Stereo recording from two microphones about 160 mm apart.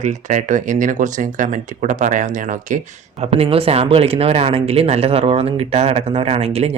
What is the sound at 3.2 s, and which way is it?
Speech, 40° right (ahead or behind).